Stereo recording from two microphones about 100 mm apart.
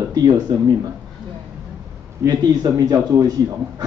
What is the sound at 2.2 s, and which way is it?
A man's voice, 40° right (ahead or behind).